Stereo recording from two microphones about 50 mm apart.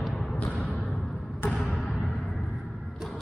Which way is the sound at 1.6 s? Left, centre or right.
Centre.